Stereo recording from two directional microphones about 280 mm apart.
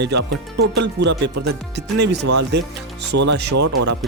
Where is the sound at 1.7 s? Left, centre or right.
Right.